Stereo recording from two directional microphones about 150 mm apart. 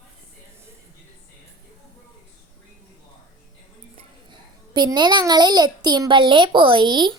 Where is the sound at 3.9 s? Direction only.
30° right (ahead or behind).